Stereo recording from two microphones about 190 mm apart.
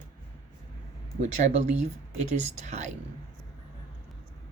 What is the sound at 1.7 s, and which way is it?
Speech, 35° right (ahead or behind).